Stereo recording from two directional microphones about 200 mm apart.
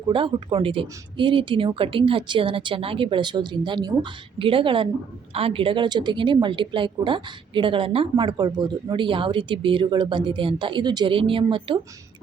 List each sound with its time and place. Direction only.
0.1 s a woman's voice: 25° right (ahead or behind)